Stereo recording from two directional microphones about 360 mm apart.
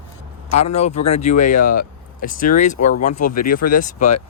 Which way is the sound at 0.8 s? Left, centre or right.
Centre.